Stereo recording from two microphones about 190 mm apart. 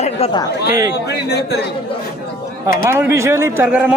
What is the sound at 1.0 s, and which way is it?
Speech, 60° left (ahead or behind).